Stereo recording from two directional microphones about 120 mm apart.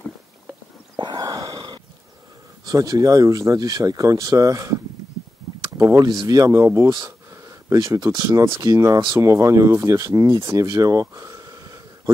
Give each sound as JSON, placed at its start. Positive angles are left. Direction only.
{"t": 0.9, "sound": "whispering", "side_deg": -35}
{"t": 2.6, "sound": "speech", "side_deg": -30}
{"t": 5.8, "sound": "speech", "side_deg": -20}
{"t": 6.0, "sound": "speech", "side_deg": -35}